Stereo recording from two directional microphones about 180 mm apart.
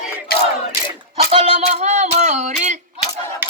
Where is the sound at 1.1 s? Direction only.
35° right (ahead or behind).